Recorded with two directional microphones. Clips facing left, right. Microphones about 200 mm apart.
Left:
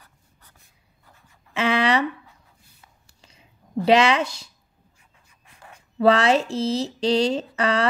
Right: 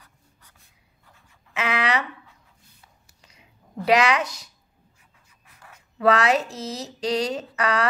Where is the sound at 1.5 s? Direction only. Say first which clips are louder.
Left 4 dB; 30° left (ahead or behind).